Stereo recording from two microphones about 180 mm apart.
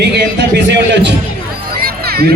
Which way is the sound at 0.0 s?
70° right (ahead or behind).